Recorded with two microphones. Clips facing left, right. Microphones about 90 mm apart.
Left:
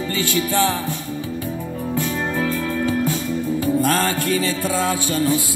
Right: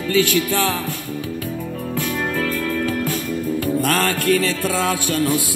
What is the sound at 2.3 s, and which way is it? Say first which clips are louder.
Music: even; 15° left (ahead or behind).